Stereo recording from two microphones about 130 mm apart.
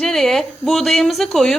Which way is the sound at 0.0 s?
5° left (ahead or behind).